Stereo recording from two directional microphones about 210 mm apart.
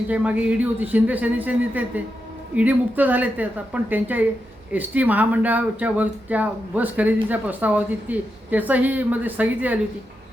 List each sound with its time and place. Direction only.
0.1 s speech: 5° right (ahead or behind)